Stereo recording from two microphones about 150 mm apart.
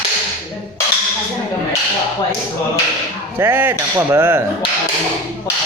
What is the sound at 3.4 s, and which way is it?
Speech, 15° right (ahead or behind).